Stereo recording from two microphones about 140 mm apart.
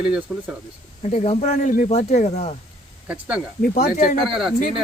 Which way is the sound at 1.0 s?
50° left (ahead or behind).